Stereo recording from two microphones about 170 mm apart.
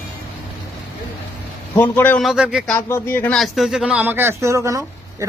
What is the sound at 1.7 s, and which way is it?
Speech, 10° left (ahead or behind).